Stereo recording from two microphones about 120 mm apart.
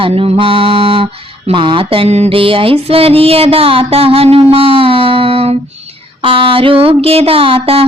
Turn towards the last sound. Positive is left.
turn(degrees=-50)  # may be behind; listen again after turning